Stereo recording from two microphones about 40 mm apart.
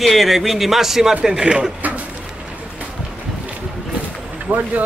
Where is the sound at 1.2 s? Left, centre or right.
Centre.